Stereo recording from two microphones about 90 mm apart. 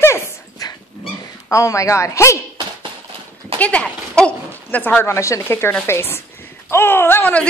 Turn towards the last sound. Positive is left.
turn(degrees=20)  # may be behind; listen again after turning